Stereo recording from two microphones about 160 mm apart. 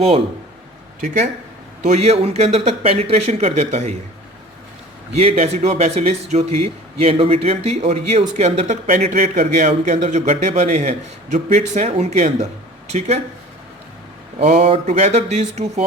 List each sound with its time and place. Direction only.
1.0 s speech: 45° right (ahead or behind)
5.1 s speech: 40° right (ahead or behind)
14.3 s speech: 50° right (ahead or behind)